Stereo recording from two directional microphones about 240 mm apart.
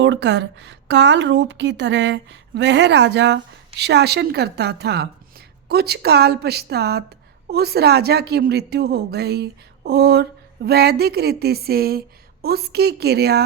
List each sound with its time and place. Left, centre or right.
0.0 s a woman's voice: right